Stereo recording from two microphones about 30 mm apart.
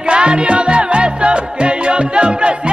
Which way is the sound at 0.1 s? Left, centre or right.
Right.